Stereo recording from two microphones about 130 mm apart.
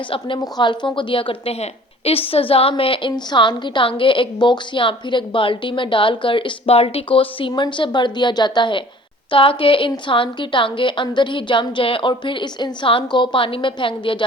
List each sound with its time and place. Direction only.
0.3 s a woman's voice: 30° left (ahead or behind)